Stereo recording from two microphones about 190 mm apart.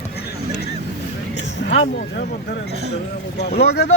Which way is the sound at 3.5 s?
60° left (ahead or behind).